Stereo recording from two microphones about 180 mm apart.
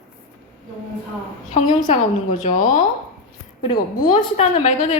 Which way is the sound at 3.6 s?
25° left (ahead or behind).